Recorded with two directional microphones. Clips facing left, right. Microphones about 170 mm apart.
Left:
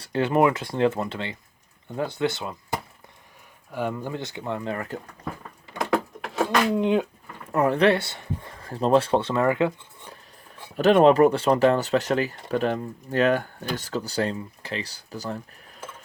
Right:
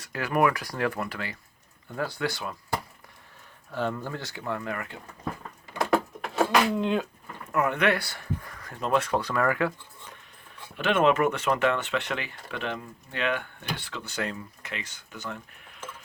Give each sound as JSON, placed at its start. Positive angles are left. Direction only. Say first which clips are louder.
{"t": 0.0, "sound": "speech", "louder": "left 4 dB", "side_deg": 30}
{"t": 5.8, "sound": "a sound", "louder": "even", "side_deg": 0}
{"t": 6.7, "sound": "speech", "louder": "left 5 dB", "side_deg": 20}
{"t": 7.5, "sound": "speech", "louder": "left 5 dB", "side_deg": 35}
{"t": 10.8, "sound": "speech", "louder": "left 7 dB", "side_deg": 35}